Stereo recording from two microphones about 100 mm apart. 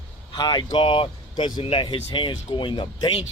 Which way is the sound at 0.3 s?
50° left (ahead or behind).